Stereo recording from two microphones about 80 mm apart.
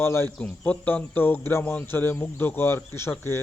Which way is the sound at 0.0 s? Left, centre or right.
Left.